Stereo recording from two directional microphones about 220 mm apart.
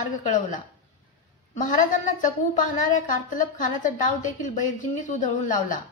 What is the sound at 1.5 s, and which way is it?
A woman's voice, 35° left (ahead or behind).